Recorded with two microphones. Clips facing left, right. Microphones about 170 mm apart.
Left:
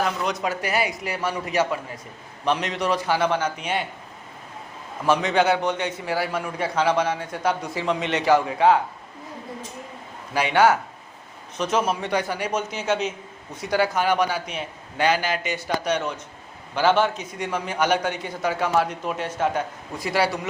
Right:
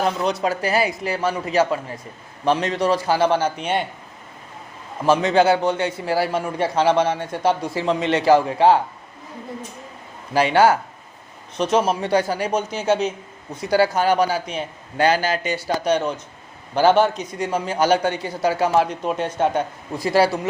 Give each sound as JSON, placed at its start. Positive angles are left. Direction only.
{"t": 0.4, "sound": "a man's voice", "side_deg": -30}
{"t": 5.0, "sound": "a man's voice", "side_deg": -30}
{"t": 10.3, "sound": "a man's voice", "side_deg": -35}